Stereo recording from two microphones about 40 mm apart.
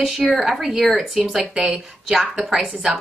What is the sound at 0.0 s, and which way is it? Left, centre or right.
Speech, centre.